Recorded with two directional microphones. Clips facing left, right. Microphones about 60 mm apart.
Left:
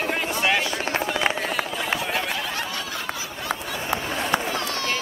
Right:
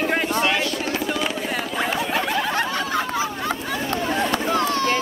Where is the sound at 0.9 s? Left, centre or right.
Left.